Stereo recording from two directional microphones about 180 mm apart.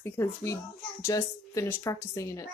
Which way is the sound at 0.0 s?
15° left (ahead or behind).